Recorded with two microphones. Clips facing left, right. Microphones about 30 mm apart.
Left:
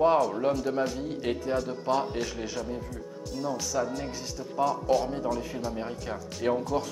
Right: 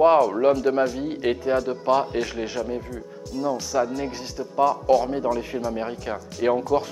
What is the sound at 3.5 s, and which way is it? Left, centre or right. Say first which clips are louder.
Speech: right 6 dB; centre.